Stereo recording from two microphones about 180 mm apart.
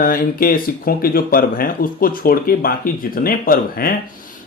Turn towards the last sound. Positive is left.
turn(degrees=55)  # may be behind; listen again after turning